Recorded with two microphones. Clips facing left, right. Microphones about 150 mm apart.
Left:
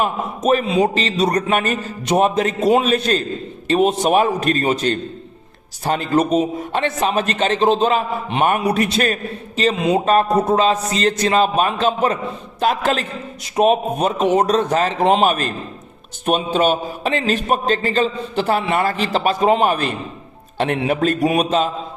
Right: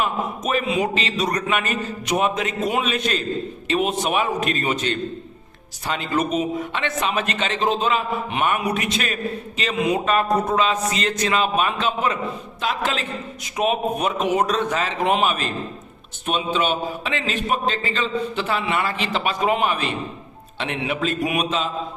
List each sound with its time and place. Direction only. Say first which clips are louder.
0.0 s a man's voice: left 4 dB; 35° left (ahead or behind)
15.3 s a man's voice: left 4 dB; 45° left (ahead or behind)